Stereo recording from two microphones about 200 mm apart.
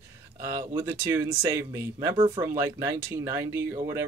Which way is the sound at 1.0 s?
15° right (ahead or behind).